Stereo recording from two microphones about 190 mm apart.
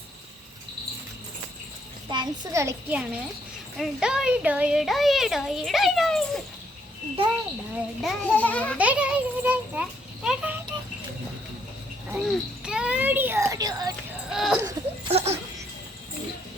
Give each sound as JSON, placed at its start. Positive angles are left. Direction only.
{"t": 2.0, "sound": "a child's voice", "side_deg": -20}
{"t": 8.0, "sound": "a child's voice", "side_deg": 5}
{"t": 8.8, "sound": "a child's voice", "side_deg": -5}
{"t": 12.1, "sound": "a child's voice", "side_deg": 0}
{"t": 14.3, "sound": "speech", "side_deg": 0}
{"t": 14.6, "sound": "a sound", "side_deg": -20}
{"t": 15.1, "sound": "speech", "side_deg": -35}